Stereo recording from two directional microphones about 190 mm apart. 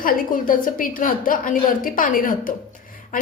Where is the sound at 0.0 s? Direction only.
45° left (ahead or behind).